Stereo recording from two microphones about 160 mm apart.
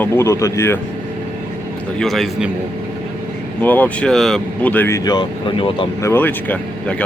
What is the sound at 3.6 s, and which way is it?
Speech, 10° left (ahead or behind).